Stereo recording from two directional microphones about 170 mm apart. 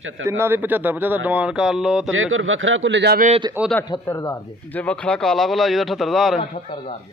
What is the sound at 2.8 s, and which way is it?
Speech, 85° right.